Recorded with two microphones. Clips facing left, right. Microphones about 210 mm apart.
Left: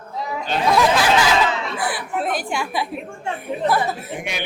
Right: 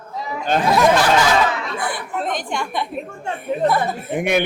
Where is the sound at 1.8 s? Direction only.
5° left (ahead or behind).